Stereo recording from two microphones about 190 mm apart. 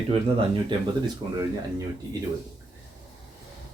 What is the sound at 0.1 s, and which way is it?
Speech, 25° right (ahead or behind).